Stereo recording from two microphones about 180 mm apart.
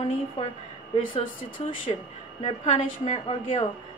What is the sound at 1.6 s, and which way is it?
A woman's voice, 35° left (ahead or behind).